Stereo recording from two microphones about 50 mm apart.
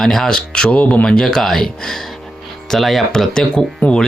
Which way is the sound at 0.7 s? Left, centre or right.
Left.